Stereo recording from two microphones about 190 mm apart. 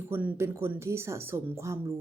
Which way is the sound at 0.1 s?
10° right (ahead or behind).